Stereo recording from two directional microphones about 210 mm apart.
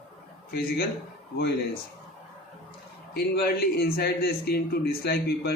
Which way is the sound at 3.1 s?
50° left (ahead or behind).